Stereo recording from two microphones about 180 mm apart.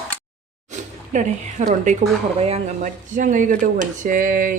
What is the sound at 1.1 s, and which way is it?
Speech, 40° right (ahead or behind).